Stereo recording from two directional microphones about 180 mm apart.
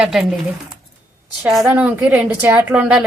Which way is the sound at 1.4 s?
5° right (ahead or behind).